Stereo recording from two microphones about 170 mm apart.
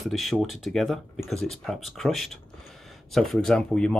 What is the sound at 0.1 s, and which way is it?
Speech, centre (ahead or behind).